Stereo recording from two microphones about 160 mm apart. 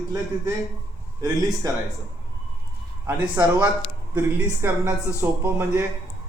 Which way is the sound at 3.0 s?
10° right (ahead or behind).